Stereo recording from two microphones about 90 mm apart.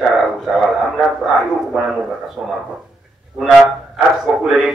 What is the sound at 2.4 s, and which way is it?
Speech, centre (ahead or behind).